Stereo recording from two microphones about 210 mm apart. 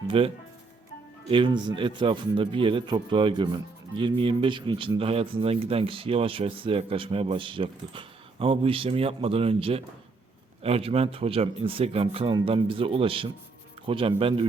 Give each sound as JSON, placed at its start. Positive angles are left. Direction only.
{"t": 0.1, "sound": "speech", "side_deg": -25}